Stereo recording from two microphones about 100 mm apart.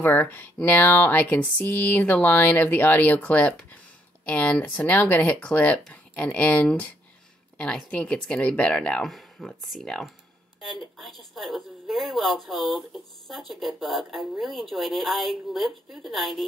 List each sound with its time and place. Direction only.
0.0 s a woman's voice: 20° left (ahead or behind); by 16.4 s centre (ahead or behind)